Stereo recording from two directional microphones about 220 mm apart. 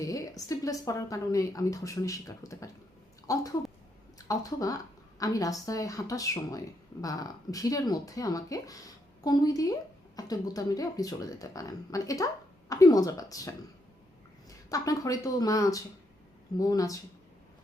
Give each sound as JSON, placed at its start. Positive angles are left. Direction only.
{"t": 0.0, "sound": "speech", "side_deg": 15}
{"t": 14.7, "sound": "speech", "side_deg": 15}